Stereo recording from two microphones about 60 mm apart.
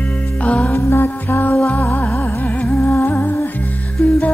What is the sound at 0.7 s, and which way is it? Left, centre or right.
Music, left.